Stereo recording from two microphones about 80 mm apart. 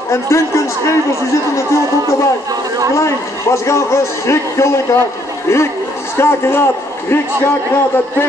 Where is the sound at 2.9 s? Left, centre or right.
Left.